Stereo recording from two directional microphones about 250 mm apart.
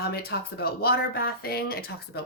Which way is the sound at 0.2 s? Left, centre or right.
Left.